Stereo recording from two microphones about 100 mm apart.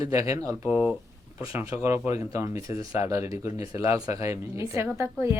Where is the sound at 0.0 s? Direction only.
35° right (ahead or behind).